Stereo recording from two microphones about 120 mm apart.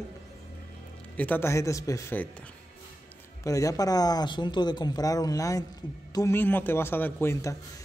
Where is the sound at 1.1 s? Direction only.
15° left (ahead or behind).